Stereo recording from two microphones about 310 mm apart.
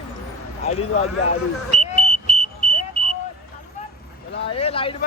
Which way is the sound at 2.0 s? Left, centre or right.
Centre.